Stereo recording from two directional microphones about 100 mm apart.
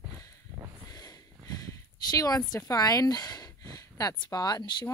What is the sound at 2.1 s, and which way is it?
A woman's voice, 40° left (ahead or behind).